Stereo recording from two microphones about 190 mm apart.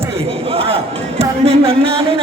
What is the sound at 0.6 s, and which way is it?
Speech, 30° right (ahead or behind).